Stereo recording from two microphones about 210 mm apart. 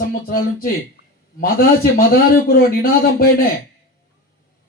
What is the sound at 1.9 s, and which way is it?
Speech, 45° left (ahead or behind).